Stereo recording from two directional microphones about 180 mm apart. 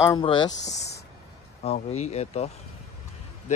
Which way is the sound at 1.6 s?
40° left (ahead or behind).